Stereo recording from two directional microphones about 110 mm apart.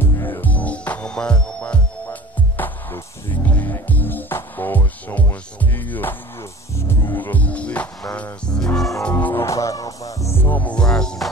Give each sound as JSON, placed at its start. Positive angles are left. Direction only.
{"t": 0.1, "sound": "music", "side_deg": 20}
{"t": 9.1, "sound": "music", "side_deg": 25}